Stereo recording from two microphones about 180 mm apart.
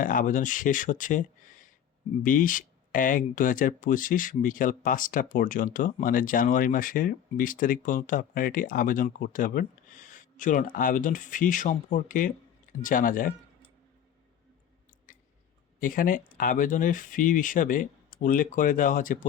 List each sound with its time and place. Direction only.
0.0 s speech: 45° left (ahead or behind)
15.8 s speech: 50° left (ahead or behind)